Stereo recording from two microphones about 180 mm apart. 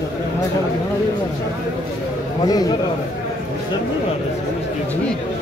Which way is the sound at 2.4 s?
20° left (ahead or behind).